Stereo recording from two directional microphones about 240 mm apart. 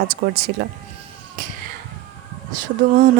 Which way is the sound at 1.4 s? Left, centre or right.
Right.